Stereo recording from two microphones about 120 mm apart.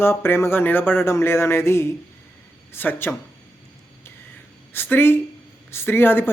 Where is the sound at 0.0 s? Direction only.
20° left (ahead or behind).